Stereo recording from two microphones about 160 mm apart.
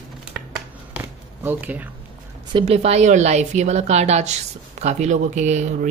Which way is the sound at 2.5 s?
40° right (ahead or behind).